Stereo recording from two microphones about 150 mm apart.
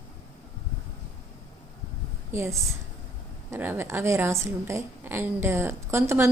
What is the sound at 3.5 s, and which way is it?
A woman's voice, 15° right (ahead or behind).